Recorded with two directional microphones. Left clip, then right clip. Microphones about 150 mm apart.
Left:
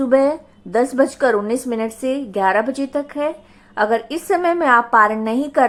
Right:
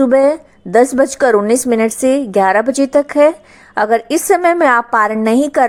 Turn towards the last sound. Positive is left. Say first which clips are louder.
# right 6 dB
turn(degrees=-40)  # may be behind; listen again after turning